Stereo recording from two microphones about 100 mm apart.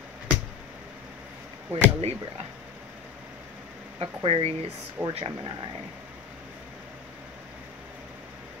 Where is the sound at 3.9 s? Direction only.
65° right (ahead or behind).